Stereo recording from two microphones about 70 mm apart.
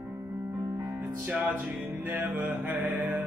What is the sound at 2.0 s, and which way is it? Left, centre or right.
Mantra, right.